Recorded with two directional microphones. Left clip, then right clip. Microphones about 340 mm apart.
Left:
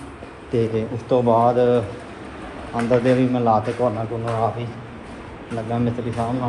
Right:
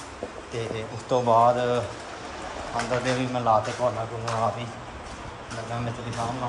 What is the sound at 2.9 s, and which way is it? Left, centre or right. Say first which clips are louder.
Speech: left 11 dB; centre.